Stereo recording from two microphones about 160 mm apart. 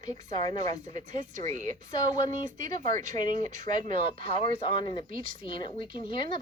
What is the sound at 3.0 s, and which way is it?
Speech, 50° right (ahead or behind).